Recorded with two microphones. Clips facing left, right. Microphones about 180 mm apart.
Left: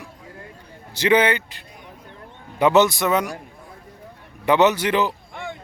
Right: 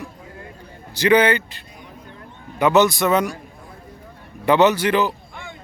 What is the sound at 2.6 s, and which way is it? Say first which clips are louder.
Speech: even; 25° left (ahead or behind).